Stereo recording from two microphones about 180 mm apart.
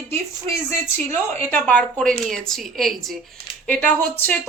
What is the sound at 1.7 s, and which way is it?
Speech, 5° left (ahead or behind).